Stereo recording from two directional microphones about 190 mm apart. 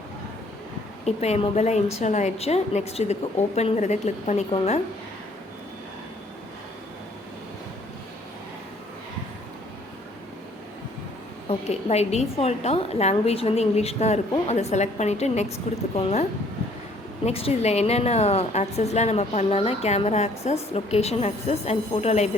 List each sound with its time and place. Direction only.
1.0 s a woman's voice: 35° left (ahead or behind)
11.4 s a woman's voice: 35° left (ahead or behind)
17.2 s a woman's voice: 30° left (ahead or behind)